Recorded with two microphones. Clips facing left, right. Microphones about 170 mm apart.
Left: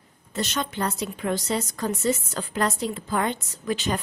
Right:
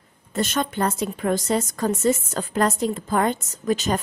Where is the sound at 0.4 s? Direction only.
50° right (ahead or behind).